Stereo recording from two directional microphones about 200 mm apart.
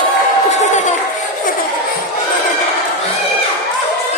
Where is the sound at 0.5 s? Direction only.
35° left (ahead or behind).